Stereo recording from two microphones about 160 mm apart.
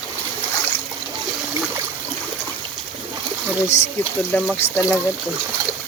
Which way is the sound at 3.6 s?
20° left (ahead or behind).